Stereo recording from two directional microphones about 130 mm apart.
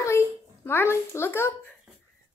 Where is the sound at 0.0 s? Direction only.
20° left (ahead or behind).